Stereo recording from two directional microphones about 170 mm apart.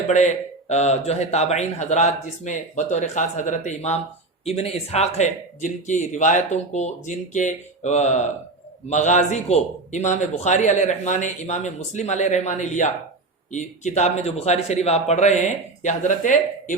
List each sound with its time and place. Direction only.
0.1 s a man's voice: 40° left (ahead or behind)